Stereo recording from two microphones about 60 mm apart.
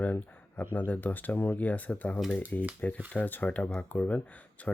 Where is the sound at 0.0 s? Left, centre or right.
Left.